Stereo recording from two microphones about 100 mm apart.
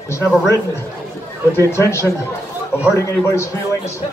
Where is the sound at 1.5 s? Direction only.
25° left (ahead or behind).